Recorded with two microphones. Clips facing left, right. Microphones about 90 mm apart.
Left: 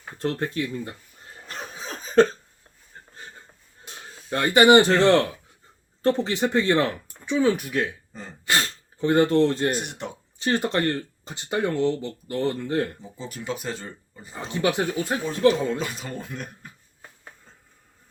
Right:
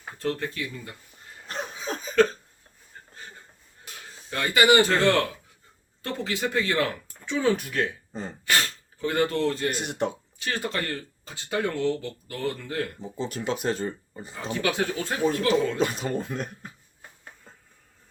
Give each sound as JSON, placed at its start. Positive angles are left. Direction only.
{"t": 0.2, "sound": "speech", "side_deg": 35}
{"t": 2.0, "sound": "cough", "side_deg": 35}
{"t": 3.8, "sound": "speech", "side_deg": 30}
{"t": 7.3, "sound": "speech", "side_deg": 10}
{"t": 8.4, "sound": "sneeze", "side_deg": 25}
{"t": 10.3, "sound": "speech", "side_deg": 25}
{"t": 13.0, "sound": "speech", "side_deg": -35}
{"t": 14.3, "sound": "speech", "side_deg": 20}
{"t": 15.8, "sound": "speech", "side_deg": -40}
{"t": 16.0, "sound": "speech", "side_deg": -30}